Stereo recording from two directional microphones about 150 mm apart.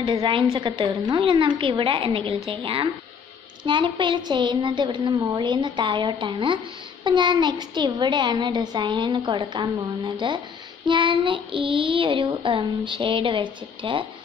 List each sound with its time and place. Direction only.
0.0 s child singing: 30° right (ahead or behind)